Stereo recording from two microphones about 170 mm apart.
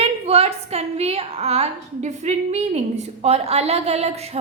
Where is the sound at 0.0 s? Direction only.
35° right (ahead or behind).